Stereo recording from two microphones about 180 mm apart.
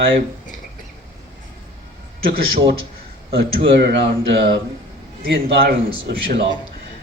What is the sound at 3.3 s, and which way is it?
A man's voice, 70° right (ahead or behind).